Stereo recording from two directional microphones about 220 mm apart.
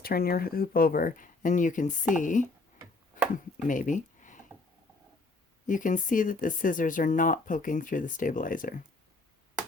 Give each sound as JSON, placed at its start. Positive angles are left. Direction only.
{"t": 0.0, "sound": "speech", "side_deg": 45}
{"t": 3.7, "sound": "speech", "side_deg": 35}
{"t": 5.6, "sound": "speech", "side_deg": 35}